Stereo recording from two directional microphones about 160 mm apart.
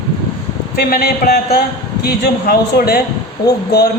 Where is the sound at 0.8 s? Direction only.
70° left (ahead or behind).